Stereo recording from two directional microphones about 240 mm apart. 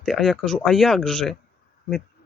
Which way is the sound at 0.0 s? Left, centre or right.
Centre.